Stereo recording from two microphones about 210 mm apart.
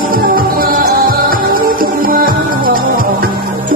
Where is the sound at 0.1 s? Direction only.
45° right (ahead or behind).